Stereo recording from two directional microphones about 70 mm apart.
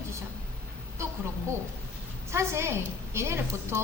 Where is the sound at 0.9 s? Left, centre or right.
Right.